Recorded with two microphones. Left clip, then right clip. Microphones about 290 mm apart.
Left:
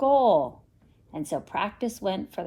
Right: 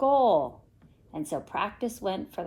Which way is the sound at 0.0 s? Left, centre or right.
Left.